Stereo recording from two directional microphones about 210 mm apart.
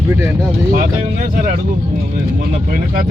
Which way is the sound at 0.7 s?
40° right (ahead or behind).